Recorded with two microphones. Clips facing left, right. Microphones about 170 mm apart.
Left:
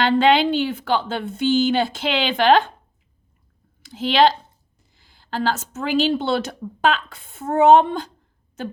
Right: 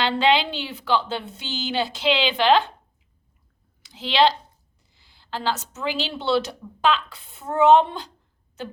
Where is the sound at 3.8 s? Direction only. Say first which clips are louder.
Left 3 dB; 50° left (ahead or behind).